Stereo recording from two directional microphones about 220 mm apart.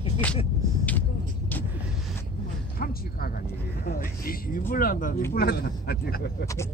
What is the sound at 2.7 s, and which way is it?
Speech, 40° left (ahead or behind).